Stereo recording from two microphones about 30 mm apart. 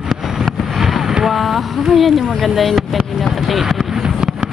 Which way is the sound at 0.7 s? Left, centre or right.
Centre.